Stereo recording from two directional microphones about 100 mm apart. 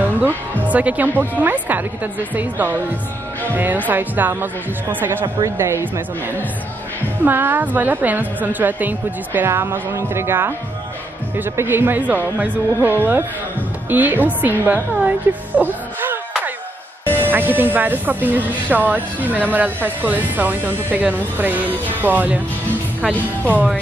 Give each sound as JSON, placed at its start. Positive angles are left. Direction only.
{"t": 0.0, "sound": "a woman's voice", "side_deg": -20}